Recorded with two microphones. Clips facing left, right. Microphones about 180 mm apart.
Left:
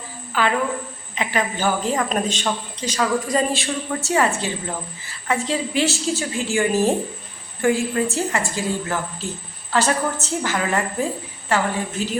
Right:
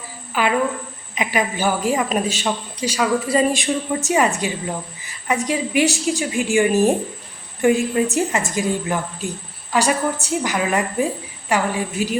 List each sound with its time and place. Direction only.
0.3 s a woman's voice: 15° right (ahead or behind)